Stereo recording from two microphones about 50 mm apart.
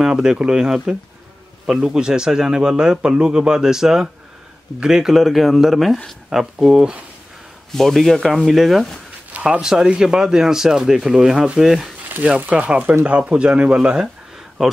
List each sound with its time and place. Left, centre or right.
0.0 s a man's voice: centre
7.7 s speech: centre
9.3 s a man's voice: right; by 11.9 s centre
12.4 s speech: right
13.2 s speech: centre
14.6 s a man's voice: centre